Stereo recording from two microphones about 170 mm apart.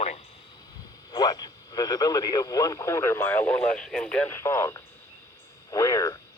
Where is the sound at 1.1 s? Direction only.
25° left (ahead or behind).